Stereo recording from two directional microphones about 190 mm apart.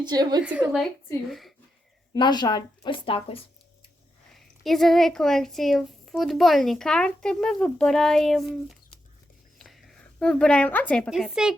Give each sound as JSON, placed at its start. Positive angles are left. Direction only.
{"t": 0.0, "sound": "a woman's voice", "side_deg": -20}
{"t": 1.3, "sound": "speech", "side_deg": 0}
{"t": 2.1, "sound": "a woman's voice", "side_deg": 25}
{"t": 4.4, "sound": "a woman's voice", "side_deg": 0}